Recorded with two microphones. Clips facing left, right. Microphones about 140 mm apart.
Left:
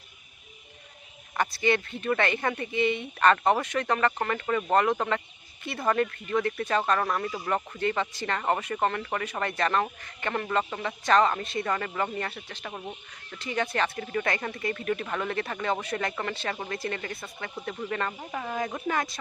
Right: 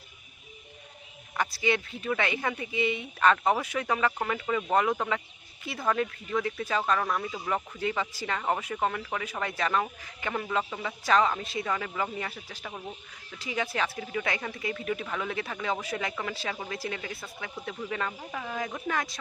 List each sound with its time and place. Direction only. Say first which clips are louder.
1.4 s speech: left 2 dB; centre (ahead or behind)
18.2 s speech: left 2 dB; 20° left (ahead or behind)
18.4 s speech: left 3 dB; 5° left (ahead or behind)